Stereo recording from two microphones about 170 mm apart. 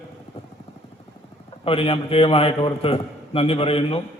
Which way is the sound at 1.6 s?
35° left (ahead or behind).